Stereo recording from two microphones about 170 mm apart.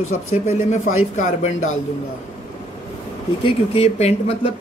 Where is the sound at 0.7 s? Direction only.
50° left (ahead or behind).